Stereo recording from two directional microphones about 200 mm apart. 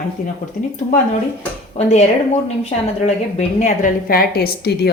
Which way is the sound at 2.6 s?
30° left (ahead or behind).